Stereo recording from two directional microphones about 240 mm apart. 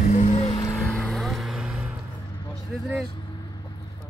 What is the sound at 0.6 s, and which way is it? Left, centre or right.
Vehicle, centre.